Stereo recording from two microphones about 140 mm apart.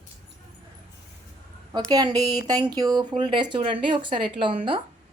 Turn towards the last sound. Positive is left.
turn(degrees=-35)  # may be behind; listen again after turning